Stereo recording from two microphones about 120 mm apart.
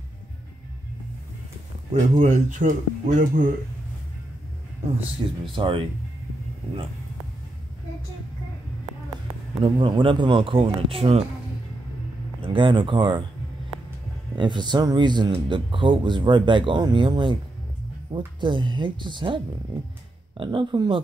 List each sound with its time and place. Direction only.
1.9 s speech: 80° right
5.4 s speech: 45° right (ahead or behind)
9.6 s speech: 45° right (ahead or behind)
12.4 s speech: 45° right (ahead or behind)
14.3 s speech: 40° right (ahead or behind)